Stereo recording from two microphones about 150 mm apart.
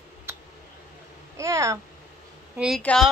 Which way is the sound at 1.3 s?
20° right (ahead or behind).